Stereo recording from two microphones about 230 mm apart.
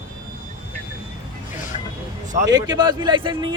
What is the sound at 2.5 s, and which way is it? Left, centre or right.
A man's voice, centre.